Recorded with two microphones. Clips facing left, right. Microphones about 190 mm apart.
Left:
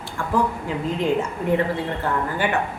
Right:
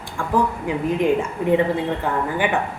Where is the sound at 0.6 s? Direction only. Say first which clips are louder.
Right 3 dB; 15° right (ahead or behind).